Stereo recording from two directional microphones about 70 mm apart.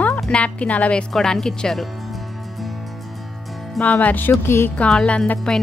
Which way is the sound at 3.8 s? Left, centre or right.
Left.